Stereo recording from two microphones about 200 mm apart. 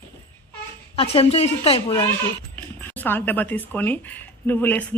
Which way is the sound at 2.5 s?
10° left (ahead or behind).